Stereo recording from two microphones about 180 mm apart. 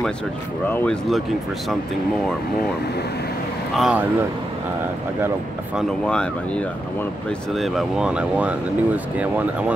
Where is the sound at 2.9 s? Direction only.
65° left (ahead or behind).